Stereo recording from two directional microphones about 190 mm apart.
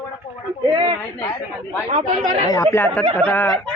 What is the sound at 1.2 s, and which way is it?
Speech, 15° left (ahead or behind).